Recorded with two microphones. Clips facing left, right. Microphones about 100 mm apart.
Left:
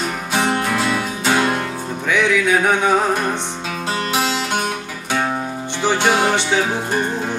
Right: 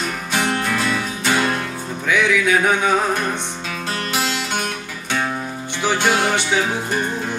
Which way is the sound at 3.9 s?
25° left (ahead or behind).